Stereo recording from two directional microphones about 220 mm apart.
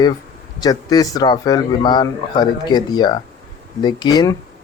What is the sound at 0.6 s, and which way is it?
A man's voice, 15° left (ahead or behind).